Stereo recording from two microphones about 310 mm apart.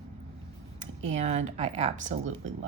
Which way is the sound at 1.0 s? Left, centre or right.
Right.